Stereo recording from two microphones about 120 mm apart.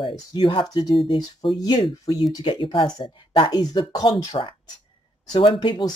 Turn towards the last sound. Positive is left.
turn(degrees=40)  # may be behind; listen again after turning